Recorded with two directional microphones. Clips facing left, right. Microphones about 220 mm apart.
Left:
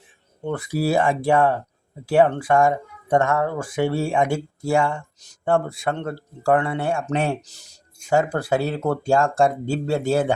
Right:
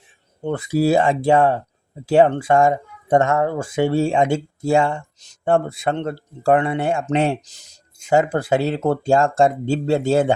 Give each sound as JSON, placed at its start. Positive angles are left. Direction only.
{"t": 0.4, "sound": "speech", "side_deg": -25}